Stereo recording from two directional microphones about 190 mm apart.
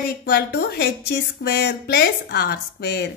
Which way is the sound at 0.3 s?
60° left (ahead or behind).